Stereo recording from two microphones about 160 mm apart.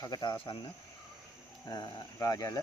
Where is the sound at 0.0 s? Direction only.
25° left (ahead or behind).